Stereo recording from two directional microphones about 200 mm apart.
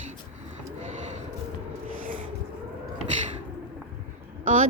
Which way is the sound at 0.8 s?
35° right (ahead or behind).